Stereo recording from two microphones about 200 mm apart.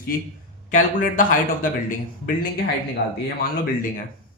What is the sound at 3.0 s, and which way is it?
Speech, 50° left (ahead or behind).